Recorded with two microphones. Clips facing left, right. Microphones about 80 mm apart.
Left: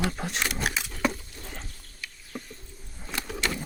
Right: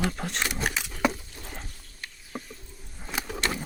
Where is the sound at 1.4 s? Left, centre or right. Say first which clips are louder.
Right 1 dB; centre.